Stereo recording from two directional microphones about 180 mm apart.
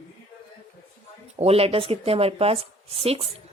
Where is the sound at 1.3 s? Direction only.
35° right (ahead or behind).